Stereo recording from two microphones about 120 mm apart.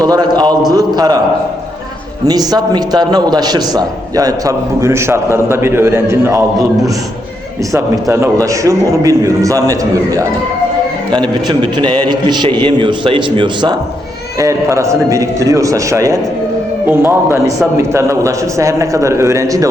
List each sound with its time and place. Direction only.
0.0 s a sound: 35° right (ahead or behind)
0.7 s a man's voice: 35° right (ahead or behind)
2.2 s a man's voice: 35° right (ahead or behind)
11.4 s a man's voice: 40° right (ahead or behind)
14.3 s a man's voice: 25° right (ahead or behind)